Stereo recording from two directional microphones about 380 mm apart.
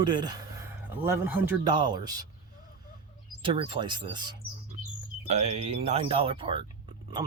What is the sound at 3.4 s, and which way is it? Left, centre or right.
Speech, centre.